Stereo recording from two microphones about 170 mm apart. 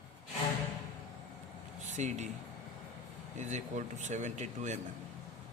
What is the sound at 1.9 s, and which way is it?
Speech, 45° right (ahead or behind).